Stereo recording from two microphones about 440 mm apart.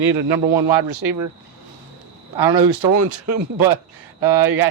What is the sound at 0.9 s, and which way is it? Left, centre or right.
Speech, right.